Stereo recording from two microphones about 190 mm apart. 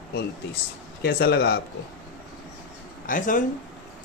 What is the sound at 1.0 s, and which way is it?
Speech, 55° left (ahead or behind).